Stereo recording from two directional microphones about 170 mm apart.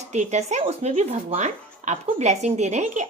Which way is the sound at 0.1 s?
40° right (ahead or behind).